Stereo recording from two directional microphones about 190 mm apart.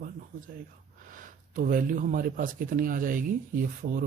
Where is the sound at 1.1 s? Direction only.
45° right (ahead or behind).